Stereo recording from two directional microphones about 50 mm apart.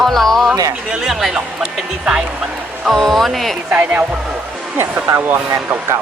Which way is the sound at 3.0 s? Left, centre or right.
Centre.